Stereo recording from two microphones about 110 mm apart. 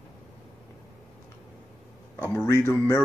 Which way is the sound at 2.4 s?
20° left (ahead or behind).